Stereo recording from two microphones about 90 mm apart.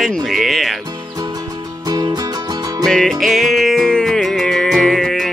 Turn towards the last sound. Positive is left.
turn(degrees=0)  # may be behind; listen again after turning